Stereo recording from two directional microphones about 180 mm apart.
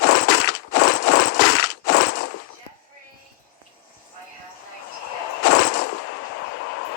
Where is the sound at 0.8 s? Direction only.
75° left (ahead or behind).